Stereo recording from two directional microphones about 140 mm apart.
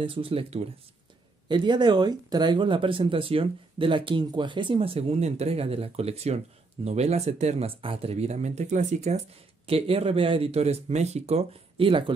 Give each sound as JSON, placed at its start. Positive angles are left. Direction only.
{"t": 0.0, "sound": "speech", "side_deg": -40}
{"t": 1.5, "sound": "speech", "side_deg": -30}